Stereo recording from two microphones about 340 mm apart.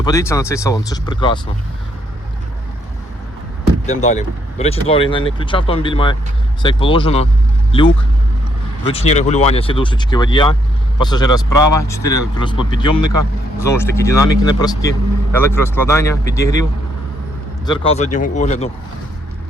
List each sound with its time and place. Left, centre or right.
0.0 s speech: centre
3.8 s speech: left
8.9 s speech: centre
17.7 s speech: centre